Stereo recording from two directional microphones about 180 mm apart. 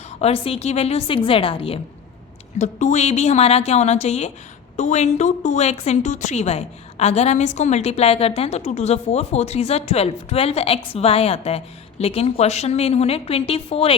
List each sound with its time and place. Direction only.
0.2 s a woman's voice: 35° left (ahead or behind)
2.6 s a woman's voice: 45° left (ahead or behind)